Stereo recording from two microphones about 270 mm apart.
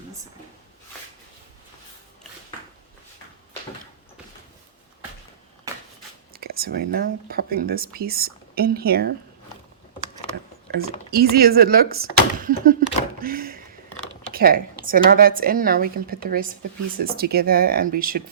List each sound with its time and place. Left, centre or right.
5.7 s a sound: centre
6.3 s speech: right
11.1 s speech: right